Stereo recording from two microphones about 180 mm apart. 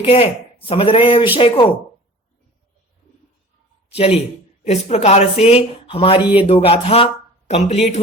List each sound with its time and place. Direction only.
0.0 s speech: 30° left (ahead or behind)
3.8 s speech: 35° left (ahead or behind)